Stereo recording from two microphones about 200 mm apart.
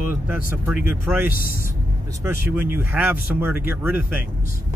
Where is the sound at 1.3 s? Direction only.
45° left (ahead or behind).